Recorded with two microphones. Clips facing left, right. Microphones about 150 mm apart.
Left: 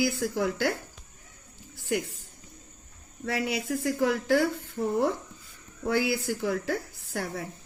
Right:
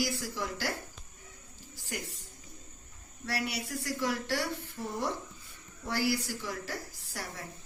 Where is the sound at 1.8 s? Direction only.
90° left.